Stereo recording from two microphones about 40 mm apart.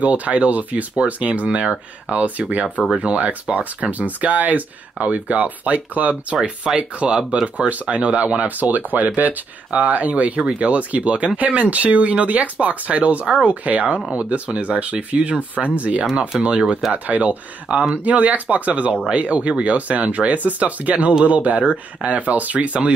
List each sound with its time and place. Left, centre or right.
0.0 s speech: right
6.7 s speech: centre
7.4 s speech: right
17.9 s speech: right